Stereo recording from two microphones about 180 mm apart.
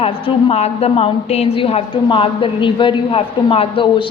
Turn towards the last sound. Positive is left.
turn(degrees=30)  # may be behind; listen again after turning